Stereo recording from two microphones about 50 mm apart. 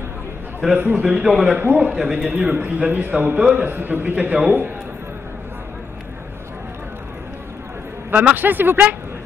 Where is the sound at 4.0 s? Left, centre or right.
Right.